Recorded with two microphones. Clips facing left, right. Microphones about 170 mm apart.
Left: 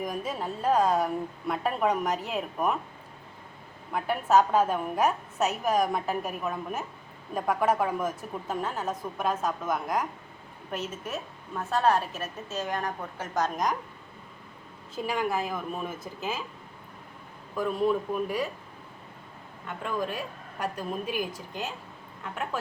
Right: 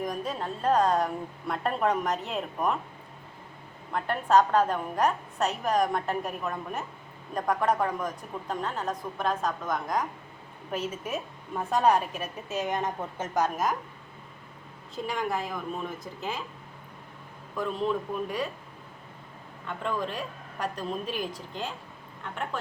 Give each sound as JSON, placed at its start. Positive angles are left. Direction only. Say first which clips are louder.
{"t": 0.0, "sound": "a woman's voice", "louder": "even", "side_deg": 0}
{"t": 3.9, "sound": "a woman's voice", "louder": "even", "side_deg": 5}
{"t": 10.7, "sound": "a woman's voice", "louder": "right 2 dB", "side_deg": -10}
{"t": 13.4, "sound": "a woman's voice", "louder": "even", "side_deg": -5}
{"t": 14.9, "sound": "a woman's voice", "louder": "left 2 dB", "side_deg": 5}
{"t": 17.6, "sound": "a woman's voice", "louder": "left 3 dB", "side_deg": 10}
{"t": 19.6, "sound": "a woman's voice", "louder": "even", "side_deg": 10}